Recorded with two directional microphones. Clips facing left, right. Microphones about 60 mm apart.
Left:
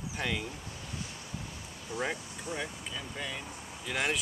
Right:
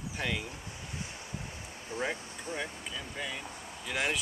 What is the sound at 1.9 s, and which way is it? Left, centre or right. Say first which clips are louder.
Speech: even; right.